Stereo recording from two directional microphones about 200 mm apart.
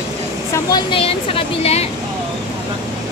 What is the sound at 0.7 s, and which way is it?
Speech, 20° left (ahead or behind).